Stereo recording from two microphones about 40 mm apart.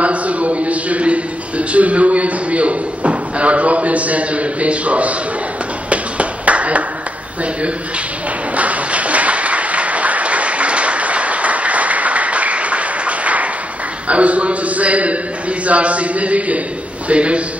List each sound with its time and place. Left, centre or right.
0.0 s a man's voice: right
5.9 s clapping: right
8.5 s applause: right
14.0 s a man's voice: right